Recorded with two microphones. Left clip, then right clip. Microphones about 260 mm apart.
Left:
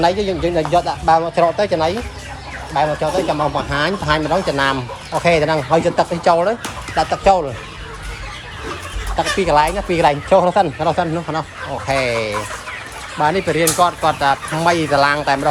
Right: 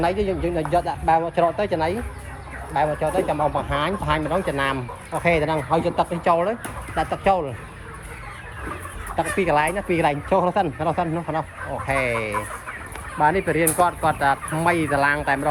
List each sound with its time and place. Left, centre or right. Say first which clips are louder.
0.0 s speech: left 6 dB; centre
9.1 s speech: left 6 dB; centre